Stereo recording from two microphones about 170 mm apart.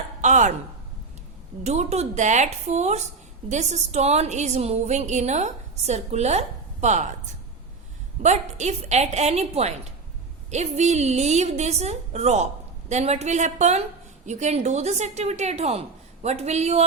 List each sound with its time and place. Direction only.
0.2 s speech: 45° right (ahead or behind)
1.6 s a woman's voice: 40° right (ahead or behind)
8.2 s a woman's voice: 40° right (ahead or behind)